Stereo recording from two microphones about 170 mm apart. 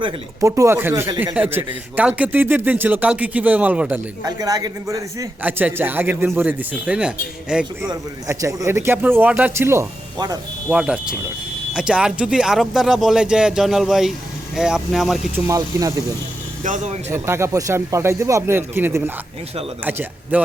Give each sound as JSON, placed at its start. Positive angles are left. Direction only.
{"t": 0.4, "sound": "a man's voice", "side_deg": -15}
{"t": 4.3, "sound": "a man's voice", "side_deg": -20}
{"t": 7.8, "sound": "a man's voice", "side_deg": -20}
{"t": 10.7, "sound": "speech", "side_deg": -5}
{"t": 15.4, "sound": "speech", "side_deg": -20}
{"t": 16.6, "sound": "speech", "side_deg": -45}
{"t": 17.1, "sound": "a man's voice", "side_deg": -15}